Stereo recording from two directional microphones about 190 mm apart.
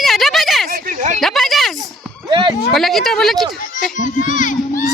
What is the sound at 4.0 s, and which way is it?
Speech, 40° left (ahead or behind).